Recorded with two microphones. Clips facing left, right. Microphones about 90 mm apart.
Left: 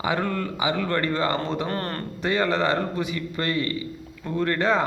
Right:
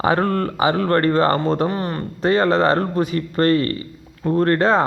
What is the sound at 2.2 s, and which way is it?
A man's voice, 35° right (ahead or behind).